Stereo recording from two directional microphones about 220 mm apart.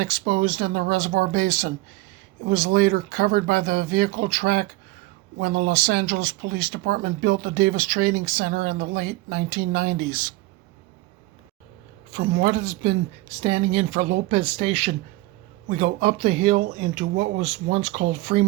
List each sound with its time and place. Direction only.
0.0 s speech: 40° right (ahead or behind)
12.1 s speech: 35° right (ahead or behind)